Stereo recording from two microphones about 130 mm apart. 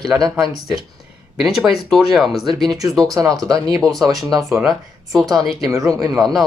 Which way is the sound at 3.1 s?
30° right (ahead or behind).